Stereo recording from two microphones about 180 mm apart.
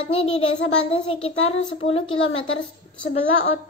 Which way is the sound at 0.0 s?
30° left (ahead or behind).